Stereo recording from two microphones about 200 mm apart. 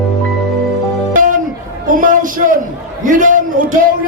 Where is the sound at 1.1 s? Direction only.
45° right (ahead or behind).